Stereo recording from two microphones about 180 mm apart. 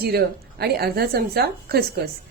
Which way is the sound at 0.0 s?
60° right (ahead or behind).